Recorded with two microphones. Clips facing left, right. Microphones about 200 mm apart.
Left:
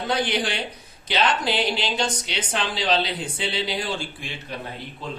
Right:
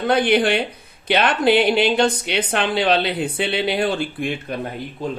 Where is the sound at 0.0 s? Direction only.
55° right (ahead or behind).